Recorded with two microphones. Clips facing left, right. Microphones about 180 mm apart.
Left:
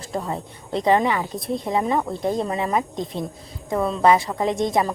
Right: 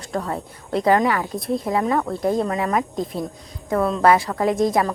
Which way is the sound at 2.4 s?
25° left (ahead or behind).